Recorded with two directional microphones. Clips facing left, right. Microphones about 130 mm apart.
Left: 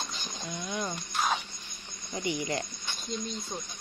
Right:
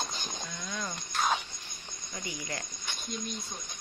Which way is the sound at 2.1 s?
25° left (ahead or behind).